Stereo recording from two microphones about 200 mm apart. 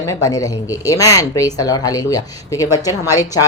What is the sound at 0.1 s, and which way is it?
Speech, 15° left (ahead or behind).